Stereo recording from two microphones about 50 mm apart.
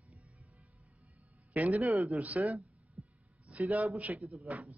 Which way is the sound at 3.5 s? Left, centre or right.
Right.